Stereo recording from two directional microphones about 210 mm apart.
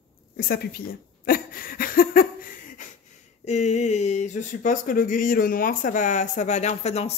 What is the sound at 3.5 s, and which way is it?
Speech, 35° left (ahead or behind).